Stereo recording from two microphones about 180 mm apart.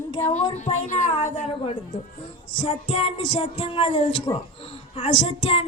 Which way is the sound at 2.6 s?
35° left (ahead or behind).